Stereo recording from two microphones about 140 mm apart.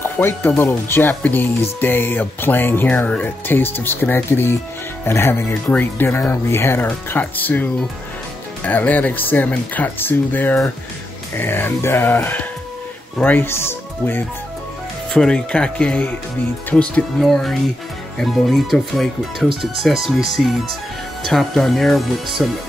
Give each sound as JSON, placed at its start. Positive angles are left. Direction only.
{"t": 0.0, "sound": "speech", "side_deg": 15}
{"t": 8.6, "sound": "speech", "side_deg": 10}
{"t": 15.1, "sound": "speech", "side_deg": 5}